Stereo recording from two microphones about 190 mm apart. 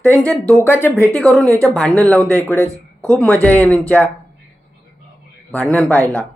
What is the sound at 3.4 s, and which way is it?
Speech, 10° left (ahead or behind).